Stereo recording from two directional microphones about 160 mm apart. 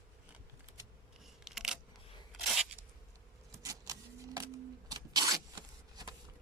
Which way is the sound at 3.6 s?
20° right (ahead or behind).